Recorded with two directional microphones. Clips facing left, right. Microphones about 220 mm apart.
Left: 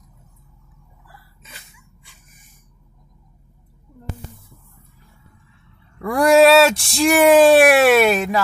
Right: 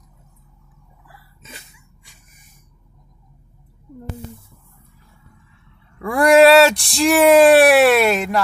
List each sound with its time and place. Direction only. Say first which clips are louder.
1.4 s dog: right 7 dB; 25° right (ahead or behind)
5.9 s speech: right 1 dB; centre (ahead or behind)